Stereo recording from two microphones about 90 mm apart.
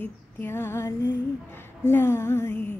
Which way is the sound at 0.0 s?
25° left (ahead or behind).